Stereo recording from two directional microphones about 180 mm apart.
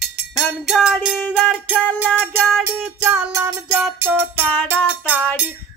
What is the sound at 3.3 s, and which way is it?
Music, 20° right (ahead or behind).